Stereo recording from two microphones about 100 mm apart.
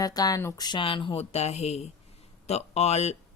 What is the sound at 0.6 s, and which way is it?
Speech, 55° left (ahead or behind).